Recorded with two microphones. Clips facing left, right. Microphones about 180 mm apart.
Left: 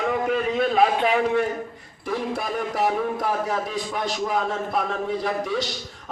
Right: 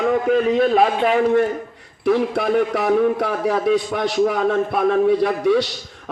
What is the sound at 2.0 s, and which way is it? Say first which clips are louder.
A man's voice: right 9 dB; 65° right (ahead or behind).